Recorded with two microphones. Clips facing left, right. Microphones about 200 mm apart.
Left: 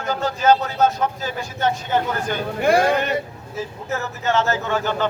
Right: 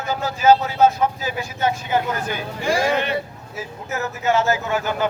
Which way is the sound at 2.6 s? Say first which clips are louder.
Left 4 dB; 60° left (ahead or behind).